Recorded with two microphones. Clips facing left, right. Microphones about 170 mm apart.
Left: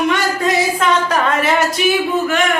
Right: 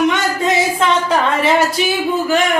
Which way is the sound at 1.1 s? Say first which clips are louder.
Right 1 dB; 30° right (ahead or behind).